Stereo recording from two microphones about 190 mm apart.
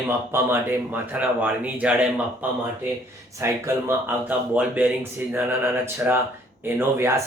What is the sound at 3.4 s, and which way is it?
Speech, 10° right (ahead or behind).